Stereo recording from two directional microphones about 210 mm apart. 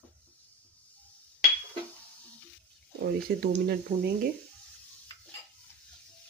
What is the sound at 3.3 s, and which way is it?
Speech, 50° right (ahead or behind).